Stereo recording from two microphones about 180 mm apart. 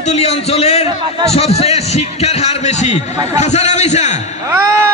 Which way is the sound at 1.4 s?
35° left (ahead or behind).